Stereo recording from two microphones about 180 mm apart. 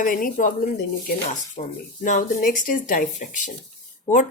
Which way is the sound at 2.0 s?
45° left (ahead or behind).